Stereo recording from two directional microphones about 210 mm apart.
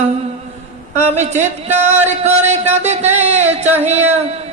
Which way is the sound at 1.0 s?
30° right (ahead or behind).